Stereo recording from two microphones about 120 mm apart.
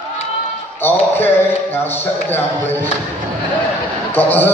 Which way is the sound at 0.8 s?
20° left (ahead or behind).